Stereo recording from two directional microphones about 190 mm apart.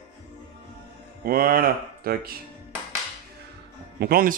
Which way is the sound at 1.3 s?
50° right (ahead or behind).